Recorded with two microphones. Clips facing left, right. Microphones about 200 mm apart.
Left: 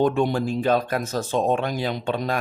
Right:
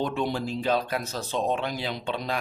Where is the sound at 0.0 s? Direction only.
50° left (ahead or behind).